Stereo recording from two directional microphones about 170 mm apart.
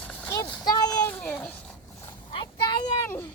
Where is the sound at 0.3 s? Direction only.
20° left (ahead or behind).